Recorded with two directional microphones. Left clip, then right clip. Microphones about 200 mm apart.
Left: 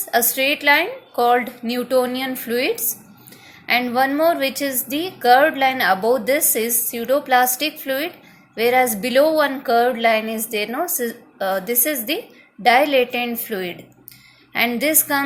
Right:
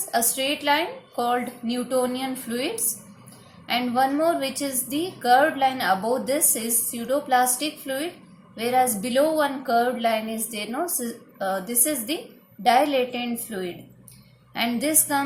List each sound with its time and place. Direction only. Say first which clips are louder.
0.0 s a woman's voice: left 6 dB; 30° left (ahead or behind)